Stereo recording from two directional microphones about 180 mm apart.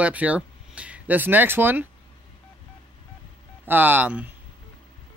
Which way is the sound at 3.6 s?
10° right (ahead or behind).